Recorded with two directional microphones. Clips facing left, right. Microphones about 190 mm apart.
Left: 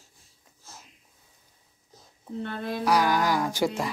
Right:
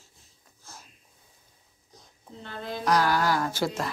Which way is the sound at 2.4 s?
60° left (ahead or behind).